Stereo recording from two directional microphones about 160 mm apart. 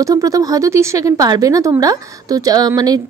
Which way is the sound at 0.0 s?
20° right (ahead or behind).